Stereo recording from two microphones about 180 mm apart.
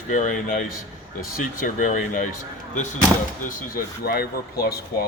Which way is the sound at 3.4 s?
55° left (ahead or behind).